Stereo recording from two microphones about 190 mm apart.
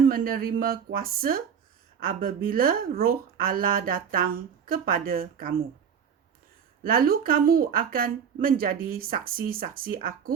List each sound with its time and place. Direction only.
0.0 s speech: 50° right (ahead or behind)
6.8 s speech: 50° right (ahead or behind)